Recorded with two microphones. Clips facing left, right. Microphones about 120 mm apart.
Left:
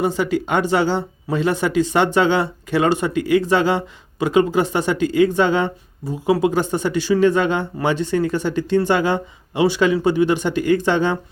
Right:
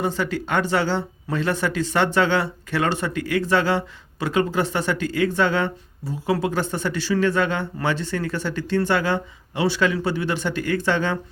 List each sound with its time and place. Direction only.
0.0 s speech: 15° left (ahead or behind)